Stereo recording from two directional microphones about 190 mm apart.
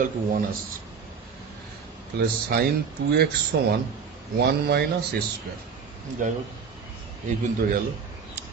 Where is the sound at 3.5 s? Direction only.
70° right (ahead or behind).